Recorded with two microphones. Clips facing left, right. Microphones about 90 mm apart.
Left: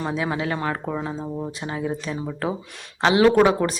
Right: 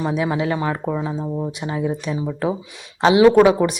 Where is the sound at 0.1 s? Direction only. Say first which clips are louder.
Right 4 dB; 20° right (ahead or behind).